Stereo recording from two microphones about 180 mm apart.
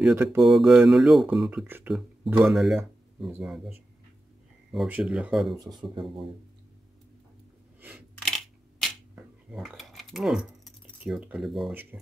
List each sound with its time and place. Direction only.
0.1 s speech: 15° right (ahead or behind)
0.4 s speech: centre (ahead or behind)
4.7 s speech: 5° right (ahead or behind)
5.8 s speech: 10° right (ahead or behind)
8.3 s camera: 5° left (ahead or behind)
9.1 s keys jangling: centre (ahead or behind)
11.7 s speech: 10° right (ahead or behind)